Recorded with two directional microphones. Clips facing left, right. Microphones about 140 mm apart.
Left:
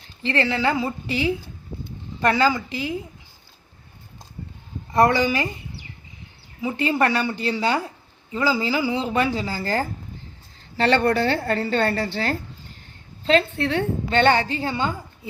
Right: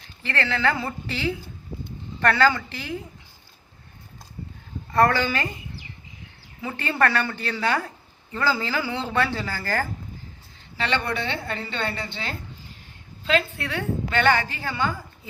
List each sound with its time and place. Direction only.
0.2 s speech: 20° left (ahead or behind)
4.9 s speech: 15° left (ahead or behind)
6.6 s speech: 15° left (ahead or behind)
10.8 s a woman's voice: 40° left (ahead or behind)
13.2 s a woman's voice: 30° left (ahead or behind)